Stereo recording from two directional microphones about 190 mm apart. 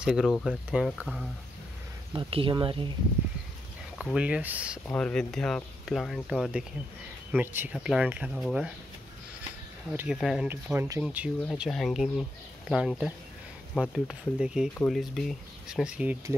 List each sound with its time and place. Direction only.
0.0 s speech: centre (ahead or behind)
2.1 s speech: 25° right (ahead or behind)
4.0 s speech: 5° right (ahead or behind)
4.8 s speech: 5° left (ahead or behind)
9.9 s speech: 5° right (ahead or behind)